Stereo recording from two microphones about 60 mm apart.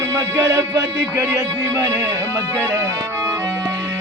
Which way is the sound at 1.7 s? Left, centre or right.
Right.